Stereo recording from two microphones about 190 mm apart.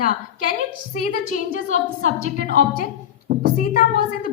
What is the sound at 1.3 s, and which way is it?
A woman's voice, 45° left (ahead or behind).